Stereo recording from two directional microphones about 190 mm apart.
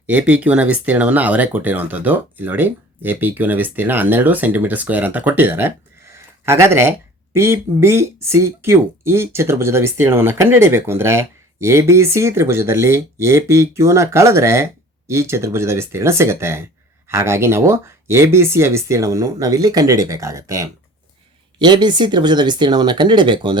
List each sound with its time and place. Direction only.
0.1 s speech: 10° right (ahead or behind); by 23.6 s 25° right (ahead or behind)